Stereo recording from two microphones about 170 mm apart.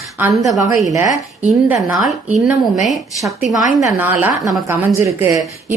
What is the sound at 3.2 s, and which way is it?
A woman's voice, 20° right (ahead or behind).